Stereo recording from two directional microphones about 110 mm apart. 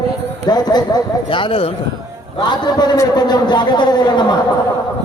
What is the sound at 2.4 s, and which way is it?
A man's voice, 40° left (ahead or behind).